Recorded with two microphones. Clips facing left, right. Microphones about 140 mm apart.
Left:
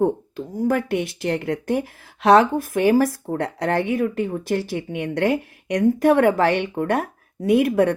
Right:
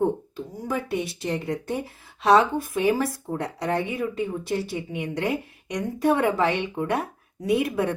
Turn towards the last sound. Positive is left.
turn(degrees=60)  # may be behind; listen again after turning